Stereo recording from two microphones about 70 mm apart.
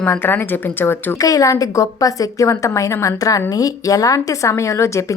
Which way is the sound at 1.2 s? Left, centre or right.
Left.